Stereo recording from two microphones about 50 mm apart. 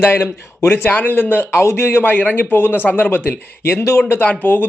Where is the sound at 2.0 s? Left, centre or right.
Left.